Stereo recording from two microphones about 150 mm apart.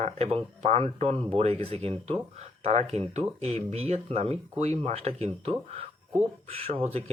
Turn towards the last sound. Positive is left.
turn(degrees=-40)  # may be behind; listen again after turning